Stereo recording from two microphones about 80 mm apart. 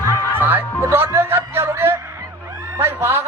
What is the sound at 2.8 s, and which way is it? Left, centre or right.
Speech, right.